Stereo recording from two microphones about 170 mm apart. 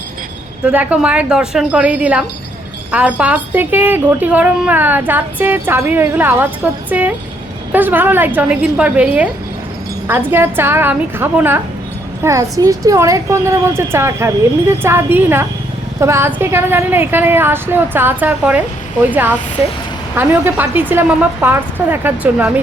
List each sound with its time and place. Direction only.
0.6 s a woman's voice: 10° right (ahead or behind)